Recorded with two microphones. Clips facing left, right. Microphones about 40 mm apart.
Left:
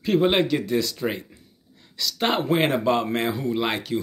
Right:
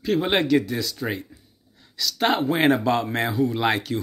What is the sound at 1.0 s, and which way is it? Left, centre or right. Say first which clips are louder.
Speech: left 1 dB; centre.